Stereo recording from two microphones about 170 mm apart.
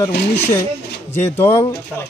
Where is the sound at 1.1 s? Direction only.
15° left (ahead or behind).